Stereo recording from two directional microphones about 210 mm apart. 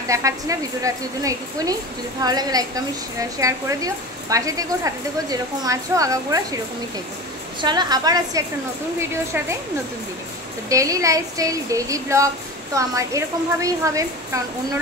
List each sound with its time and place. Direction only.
0.1 s a woman's voice: 15° right (ahead or behind)
7.6 s a woman's voice: 20° right (ahead or behind)
10.7 s a woman's voice: 15° right (ahead or behind)